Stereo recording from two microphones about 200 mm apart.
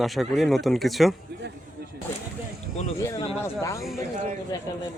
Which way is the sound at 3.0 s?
15° left (ahead or behind).